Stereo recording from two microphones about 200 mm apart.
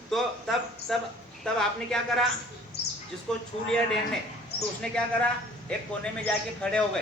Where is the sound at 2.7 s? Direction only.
55° left (ahead or behind).